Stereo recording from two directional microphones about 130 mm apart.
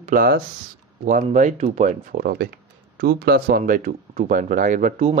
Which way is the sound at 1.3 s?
60° right (ahead or behind).